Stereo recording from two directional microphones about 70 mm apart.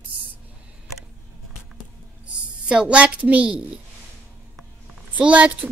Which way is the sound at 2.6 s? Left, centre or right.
Centre.